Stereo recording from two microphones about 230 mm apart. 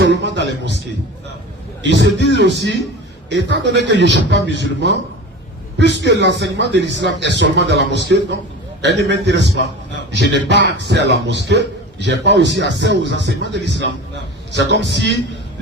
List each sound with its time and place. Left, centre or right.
0.0 s a man's voice: right
1.8 s a man's voice: right